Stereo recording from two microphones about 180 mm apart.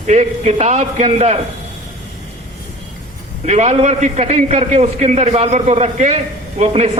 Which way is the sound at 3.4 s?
40° right (ahead or behind).